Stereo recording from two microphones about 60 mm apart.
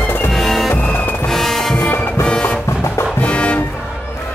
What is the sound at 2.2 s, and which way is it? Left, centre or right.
Music, centre.